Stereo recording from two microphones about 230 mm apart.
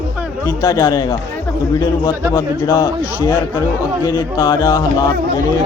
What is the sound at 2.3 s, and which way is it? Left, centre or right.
A man's voice, centre.